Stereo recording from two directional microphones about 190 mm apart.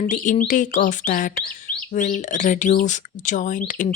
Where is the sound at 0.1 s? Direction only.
40° left (ahead or behind).